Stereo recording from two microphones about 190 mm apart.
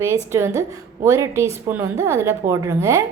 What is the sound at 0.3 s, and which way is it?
A woman's voice, 15° right (ahead or behind).